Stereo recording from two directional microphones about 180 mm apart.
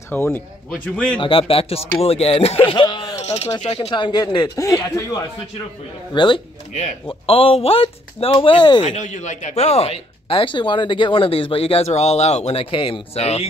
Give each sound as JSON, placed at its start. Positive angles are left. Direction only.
{"t": 0.1, "sound": "a man's voice", "side_deg": 10}
{"t": 1.2, "sound": "speech", "side_deg": 30}
{"t": 3.2, "sound": "speech", "side_deg": 35}
{"t": 6.7, "sound": "speech", "side_deg": 40}
{"t": 8.8, "sound": "speech", "side_deg": 40}